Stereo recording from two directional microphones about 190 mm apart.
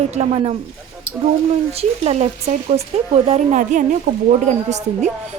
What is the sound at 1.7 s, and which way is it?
A woman's voice, 30° right (ahead or behind).